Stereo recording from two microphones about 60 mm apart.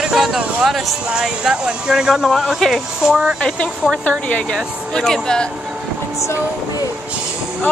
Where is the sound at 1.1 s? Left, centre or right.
Centre.